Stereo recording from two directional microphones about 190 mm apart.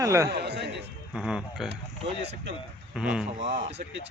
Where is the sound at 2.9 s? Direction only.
5° right (ahead or behind).